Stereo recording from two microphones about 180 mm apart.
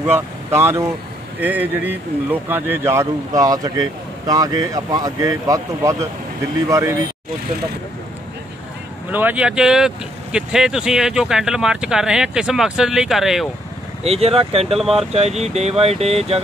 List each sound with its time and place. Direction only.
0.0 s speech: 15° right (ahead or behind)
9.1 s speech: 10° right (ahead or behind)
14.0 s speech: 35° right (ahead or behind)
14.8 s speech: centre (ahead or behind)
15.1 s speech: 35° right (ahead or behind)